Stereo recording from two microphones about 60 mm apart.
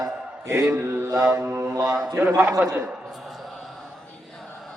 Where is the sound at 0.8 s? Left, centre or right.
Right.